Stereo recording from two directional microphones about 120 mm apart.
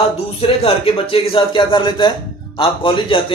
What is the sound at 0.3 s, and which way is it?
Speech, 50° left (ahead or behind).